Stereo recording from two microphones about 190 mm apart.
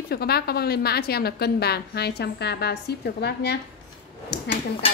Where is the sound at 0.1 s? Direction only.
55° left (ahead or behind).